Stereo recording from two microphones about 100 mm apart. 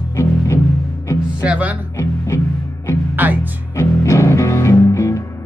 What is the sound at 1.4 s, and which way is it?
Speech, 15° right (ahead or behind).